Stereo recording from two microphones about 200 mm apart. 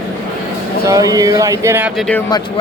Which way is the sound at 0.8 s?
20° right (ahead or behind).